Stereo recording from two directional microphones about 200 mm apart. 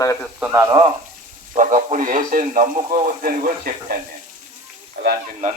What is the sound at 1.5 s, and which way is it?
A man's voice, 35° right (ahead or behind).